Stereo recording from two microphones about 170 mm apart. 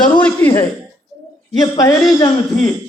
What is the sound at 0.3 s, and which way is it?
Speech, 10° left (ahead or behind).